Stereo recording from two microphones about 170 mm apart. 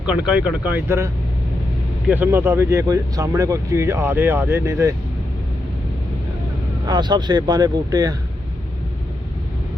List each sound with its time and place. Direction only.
0.0 s speech: 5° right (ahead or behind)
6.8 s speech: 25° right (ahead or behind)